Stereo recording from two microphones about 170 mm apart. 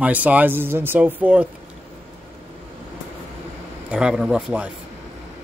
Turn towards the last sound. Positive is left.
turn(degrees=-5)  # may be behind; listen again after turning